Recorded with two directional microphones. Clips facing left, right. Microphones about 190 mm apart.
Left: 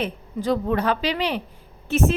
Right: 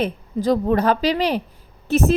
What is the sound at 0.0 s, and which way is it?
A woman's voice, 40° right (ahead or behind).